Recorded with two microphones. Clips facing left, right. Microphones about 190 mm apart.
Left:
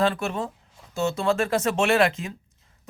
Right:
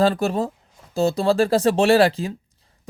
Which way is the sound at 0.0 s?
35° right (ahead or behind).